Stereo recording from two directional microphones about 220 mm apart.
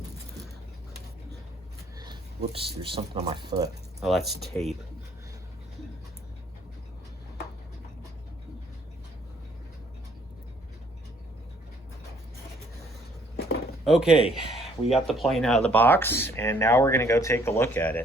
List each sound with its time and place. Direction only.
2.4 s speech: 25° right (ahead or behind)
4.0 s speech: centre (ahead or behind)
13.8 s speech: centre (ahead or behind)